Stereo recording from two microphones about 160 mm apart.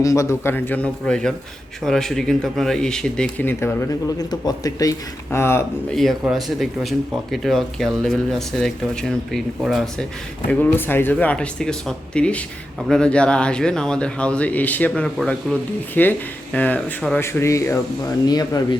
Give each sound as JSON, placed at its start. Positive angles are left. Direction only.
{"t": 0.0, "sound": "speech", "side_deg": 20}
{"t": 5.9, "sound": "speech", "side_deg": 0}
{"t": 10.5, "sound": "speech", "side_deg": 10}